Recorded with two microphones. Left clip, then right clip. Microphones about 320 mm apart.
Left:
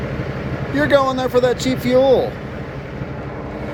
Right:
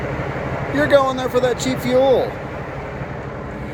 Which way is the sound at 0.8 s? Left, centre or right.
Centre.